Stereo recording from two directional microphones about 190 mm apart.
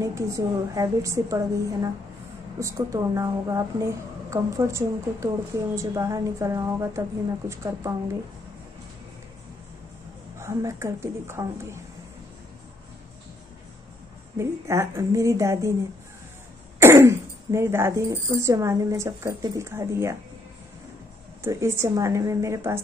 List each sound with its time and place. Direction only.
0.0 s speech: 15° right (ahead or behind)
10.4 s speech: 15° right (ahead or behind)
14.4 s speech: 15° right (ahead or behind)
16.8 s speech: 15° right (ahead or behind)
21.4 s speech: 15° right (ahead or behind)